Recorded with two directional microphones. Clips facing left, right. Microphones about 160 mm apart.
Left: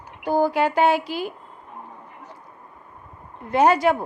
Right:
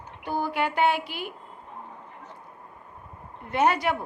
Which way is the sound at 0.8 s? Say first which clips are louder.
Left 3 dB; 90° left.